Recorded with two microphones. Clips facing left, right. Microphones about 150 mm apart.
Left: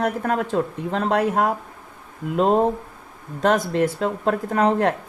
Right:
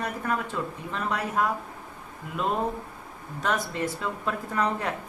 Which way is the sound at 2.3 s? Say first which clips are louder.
Left 10 dB; 90° left.